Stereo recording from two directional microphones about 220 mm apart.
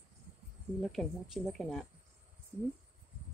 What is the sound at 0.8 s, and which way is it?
Speech, centre (ahead or behind).